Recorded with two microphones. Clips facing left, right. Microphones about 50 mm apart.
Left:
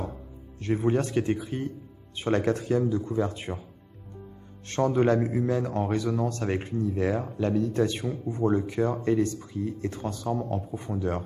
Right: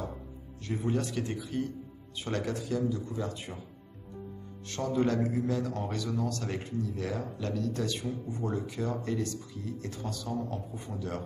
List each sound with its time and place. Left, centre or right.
0.7 s speech: left
4.6 s speech: left